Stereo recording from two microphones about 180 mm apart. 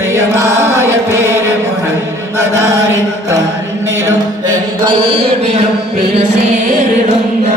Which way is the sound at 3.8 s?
15° right (ahead or behind).